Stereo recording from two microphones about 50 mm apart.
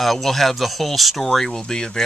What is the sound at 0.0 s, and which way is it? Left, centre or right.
Speech, centre.